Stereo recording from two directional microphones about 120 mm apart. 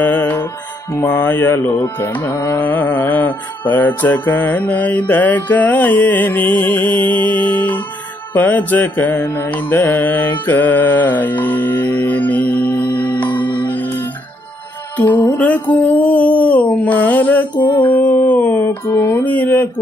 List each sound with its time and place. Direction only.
0.0 s music: 15° left (ahead or behind)
12.8 s music: 40° left (ahead or behind)
13.2 s music: 15° left (ahead or behind)
15.0 s music: 15° left (ahead or behind)
17.7 s mantra: 15° left (ahead or behind)